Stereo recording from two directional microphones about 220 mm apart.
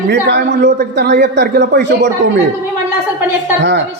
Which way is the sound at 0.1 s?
50° right (ahead or behind).